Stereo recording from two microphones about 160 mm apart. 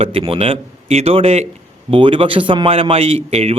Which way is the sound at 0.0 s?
35° right (ahead or behind).